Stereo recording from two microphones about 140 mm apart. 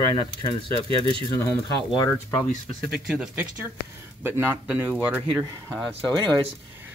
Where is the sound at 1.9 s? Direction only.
30° left (ahead or behind).